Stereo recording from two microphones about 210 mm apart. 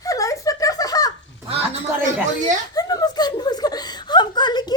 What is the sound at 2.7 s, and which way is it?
Chuckle, 20° left (ahead or behind).